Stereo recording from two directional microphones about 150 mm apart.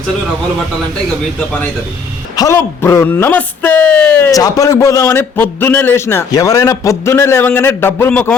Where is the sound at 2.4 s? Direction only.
20° left (ahead or behind).